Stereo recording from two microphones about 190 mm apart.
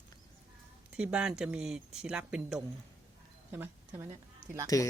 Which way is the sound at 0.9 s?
5° right (ahead or behind).